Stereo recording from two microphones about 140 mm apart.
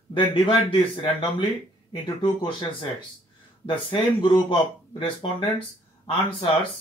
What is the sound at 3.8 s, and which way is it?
Speech, 35° left (ahead or behind).